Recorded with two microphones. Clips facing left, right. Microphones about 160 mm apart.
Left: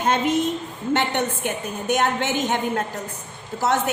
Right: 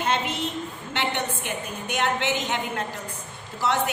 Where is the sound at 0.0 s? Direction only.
45° left (ahead or behind).